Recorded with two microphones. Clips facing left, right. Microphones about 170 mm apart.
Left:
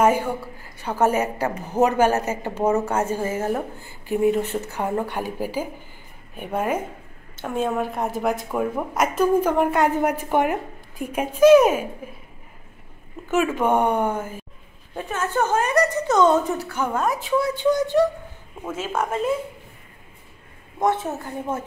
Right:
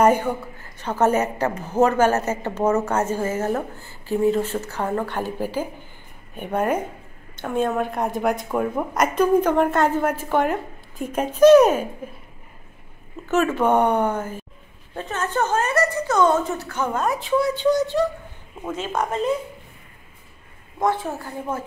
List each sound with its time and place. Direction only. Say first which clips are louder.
0.8 s a woman's voice: right 1 dB; 10° left (ahead or behind)
13.3 s a woman's voice: right 1 dB; 10° left (ahead or behind)
20.8 s a woman's voice: left 1 dB; 20° left (ahead or behind)